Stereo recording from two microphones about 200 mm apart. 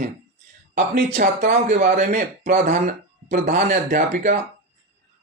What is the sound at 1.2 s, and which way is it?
Speech, 40° right (ahead or behind).